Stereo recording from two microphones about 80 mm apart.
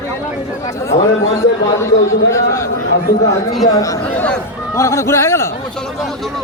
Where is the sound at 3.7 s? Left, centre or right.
Left.